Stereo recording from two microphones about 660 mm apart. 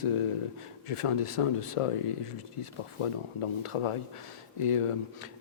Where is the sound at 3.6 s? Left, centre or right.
Left.